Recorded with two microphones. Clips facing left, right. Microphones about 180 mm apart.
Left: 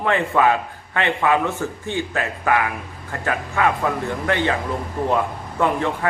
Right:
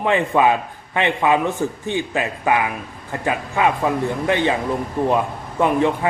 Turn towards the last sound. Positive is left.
turn(degrees=-20)  # may be behind; listen again after turning